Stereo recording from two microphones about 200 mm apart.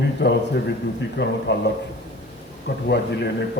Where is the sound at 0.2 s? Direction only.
55° left (ahead or behind).